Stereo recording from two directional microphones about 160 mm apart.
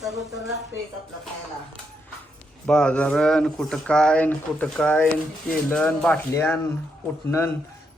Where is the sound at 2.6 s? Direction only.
5° left (ahead or behind).